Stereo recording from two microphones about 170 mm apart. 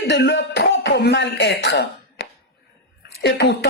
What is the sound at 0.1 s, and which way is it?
Speech, 90° left.